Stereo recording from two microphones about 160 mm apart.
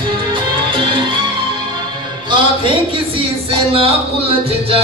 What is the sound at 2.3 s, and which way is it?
Music, 30° right (ahead or behind).